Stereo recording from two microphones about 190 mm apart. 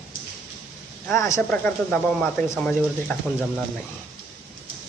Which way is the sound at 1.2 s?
15° left (ahead or behind).